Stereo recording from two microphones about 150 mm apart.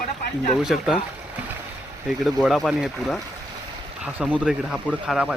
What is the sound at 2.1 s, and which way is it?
Speech, centre (ahead or behind).